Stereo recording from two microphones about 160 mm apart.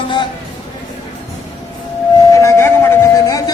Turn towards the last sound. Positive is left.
turn(degrees=20)  # may be behind; listen again after turning